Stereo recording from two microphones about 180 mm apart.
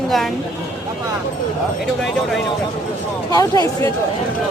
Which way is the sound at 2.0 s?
Centre (ahead or behind).